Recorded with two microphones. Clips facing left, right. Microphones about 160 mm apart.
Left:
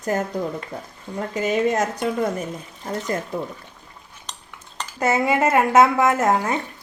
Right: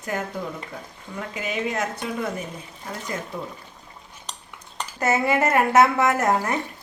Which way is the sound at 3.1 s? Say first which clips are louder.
Left 2 dB; 50° left (ahead or behind).